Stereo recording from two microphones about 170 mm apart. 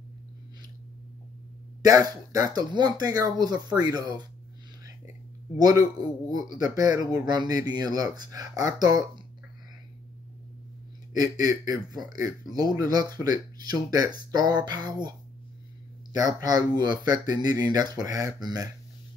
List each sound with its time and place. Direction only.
1.8 s speech: 20° right (ahead or behind)
5.6 s speech: 20° right (ahead or behind)
11.1 s speech: 20° right (ahead or behind)